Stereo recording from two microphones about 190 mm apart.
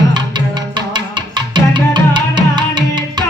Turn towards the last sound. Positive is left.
turn(degrees=-20)  # may be behind; listen again after turning